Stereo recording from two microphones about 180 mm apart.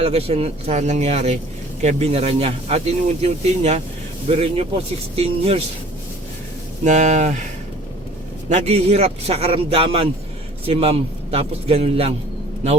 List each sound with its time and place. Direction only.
0.0 s speech: 35° right (ahead or behind)
6.8 s speech: 40° right (ahead or behind)
8.4 s speech: 40° right (ahead or behind)